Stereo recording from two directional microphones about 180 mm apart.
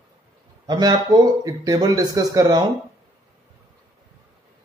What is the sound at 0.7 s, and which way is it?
Speech, 20° right (ahead or behind).